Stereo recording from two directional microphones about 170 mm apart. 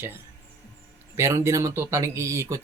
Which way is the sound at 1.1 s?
15° right (ahead or behind).